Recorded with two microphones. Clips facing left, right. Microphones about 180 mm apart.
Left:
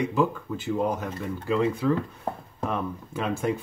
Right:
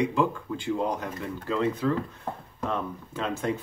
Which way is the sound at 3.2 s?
10° left (ahead or behind).